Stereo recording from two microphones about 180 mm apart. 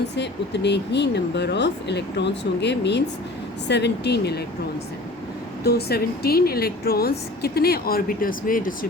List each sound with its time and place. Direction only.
0.2 s speech: 70° left (ahead or behind)
5.6 s speech: 60° left (ahead or behind)